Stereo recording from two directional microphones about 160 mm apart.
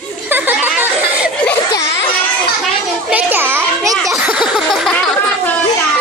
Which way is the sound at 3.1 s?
10° right (ahead or behind).